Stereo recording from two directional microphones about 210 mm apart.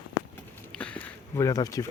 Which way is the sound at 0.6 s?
5° left (ahead or behind).